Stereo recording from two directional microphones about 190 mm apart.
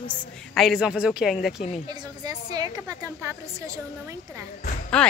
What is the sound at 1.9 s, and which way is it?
A woman's voice, 20° right (ahead or behind).